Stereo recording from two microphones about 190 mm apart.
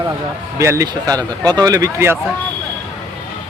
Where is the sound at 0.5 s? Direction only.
15° right (ahead or behind).